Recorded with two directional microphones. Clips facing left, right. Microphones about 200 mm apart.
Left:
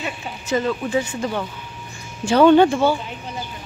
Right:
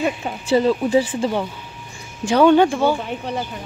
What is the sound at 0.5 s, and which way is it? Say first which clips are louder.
Speech: right 5 dB; 30° right (ahead or behind).